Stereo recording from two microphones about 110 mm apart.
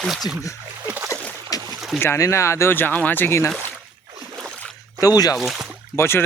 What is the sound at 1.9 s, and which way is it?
Speech, 25° left (ahead or behind).